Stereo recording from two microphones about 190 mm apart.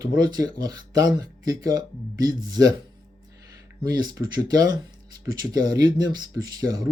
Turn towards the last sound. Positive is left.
turn(degrees=-20)  # may be behind; listen again after turning